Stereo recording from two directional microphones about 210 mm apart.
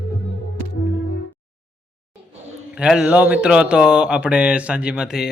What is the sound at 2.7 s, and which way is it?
Speech, 5° right (ahead or behind).